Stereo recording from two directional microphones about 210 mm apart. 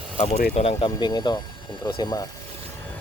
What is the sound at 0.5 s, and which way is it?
Speech, 25° left (ahead or behind).